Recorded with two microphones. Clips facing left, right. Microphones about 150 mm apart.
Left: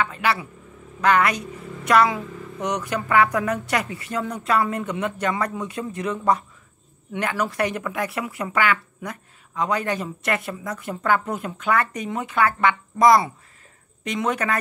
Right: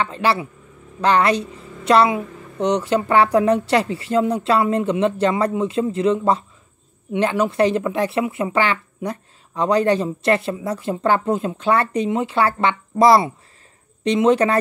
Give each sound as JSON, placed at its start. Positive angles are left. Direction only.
{"t": 0.0, "sound": "speech", "side_deg": -30}